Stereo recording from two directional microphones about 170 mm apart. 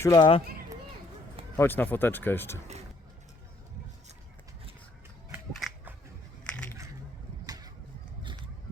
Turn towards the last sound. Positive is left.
turn(degrees=-20)  # may be behind; listen again after turning